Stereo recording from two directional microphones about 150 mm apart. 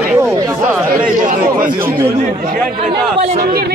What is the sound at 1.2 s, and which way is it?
Speech, 65° right (ahead or behind).